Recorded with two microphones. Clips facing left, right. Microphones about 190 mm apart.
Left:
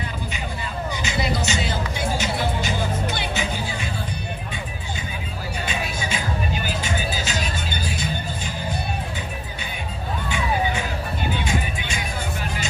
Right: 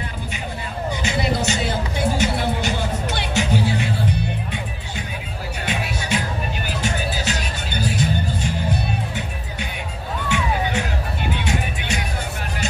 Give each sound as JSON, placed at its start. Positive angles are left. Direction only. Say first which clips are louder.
{"t": 1.0, "sound": "music", "louder": "right 3 dB", "side_deg": -60}
{"t": 2.1, "sound": "music", "louder": "right 3 dB", "side_deg": -70}
{"t": 5.7, "sound": "music", "louder": "right 5 dB", "side_deg": -70}
{"t": 10.2, "sound": "music", "louder": "right 1 dB", "side_deg": -75}